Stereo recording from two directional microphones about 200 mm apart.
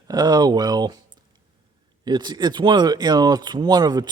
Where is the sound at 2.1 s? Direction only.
20° right (ahead or behind).